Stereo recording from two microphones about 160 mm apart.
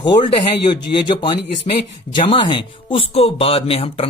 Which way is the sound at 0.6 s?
30° left (ahead or behind).